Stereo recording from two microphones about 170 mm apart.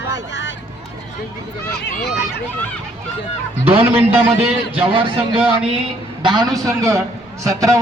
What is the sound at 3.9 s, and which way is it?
Speech, 10° right (ahead or behind).